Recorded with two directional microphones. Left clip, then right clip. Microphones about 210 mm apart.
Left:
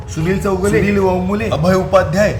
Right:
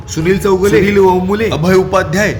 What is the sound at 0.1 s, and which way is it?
Speech, 25° right (ahead or behind).